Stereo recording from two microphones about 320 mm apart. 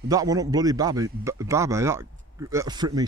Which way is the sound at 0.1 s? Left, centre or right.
Centre.